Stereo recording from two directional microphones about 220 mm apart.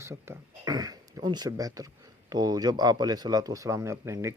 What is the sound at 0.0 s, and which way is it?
Speech, 10° right (ahead or behind).